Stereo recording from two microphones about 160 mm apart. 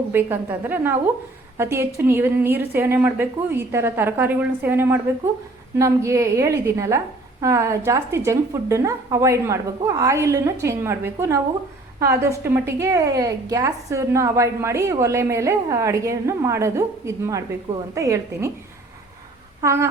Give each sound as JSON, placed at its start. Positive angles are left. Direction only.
{"t": 0.1, "sound": "a woman's voice", "side_deg": -15}
{"t": 19.6, "sound": "a woman's voice", "side_deg": -15}